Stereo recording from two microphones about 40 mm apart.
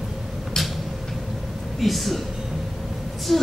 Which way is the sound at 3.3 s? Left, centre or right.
Centre.